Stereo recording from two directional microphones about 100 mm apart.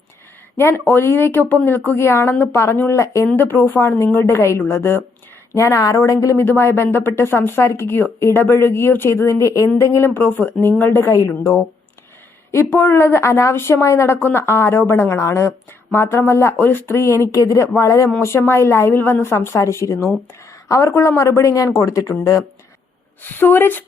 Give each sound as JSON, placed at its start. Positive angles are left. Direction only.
{"t": 0.5, "sound": "speech", "side_deg": 25}
{"t": 6.3, "sound": "speech", "side_deg": 25}
{"t": 23.2, "sound": "speech", "side_deg": 20}